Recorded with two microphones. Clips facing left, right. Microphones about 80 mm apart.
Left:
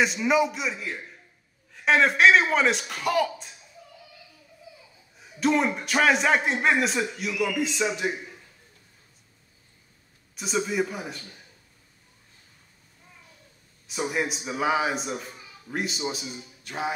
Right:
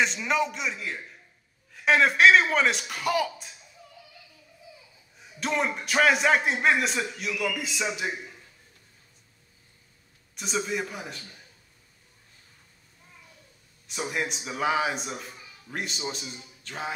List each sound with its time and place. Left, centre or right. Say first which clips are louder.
0.0 s a man's voice: left 3 dB; centre
5.4 s a man's voice: left 5 dB; centre
10.3 s a man's voice: left 3 dB; centre
13.8 s a man's voice: left 3 dB; centre